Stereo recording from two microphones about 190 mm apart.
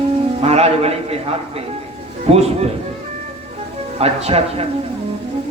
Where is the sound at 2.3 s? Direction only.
35° right (ahead or behind).